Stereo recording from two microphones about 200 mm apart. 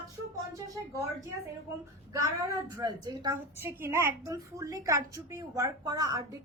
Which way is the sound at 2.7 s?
20° right (ahead or behind).